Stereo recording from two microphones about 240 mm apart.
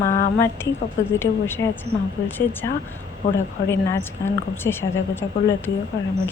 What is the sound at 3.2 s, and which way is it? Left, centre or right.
Speech, left.